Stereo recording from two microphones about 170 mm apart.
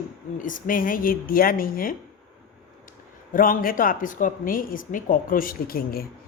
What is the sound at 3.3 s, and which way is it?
A woman's voice, 55° left (ahead or behind).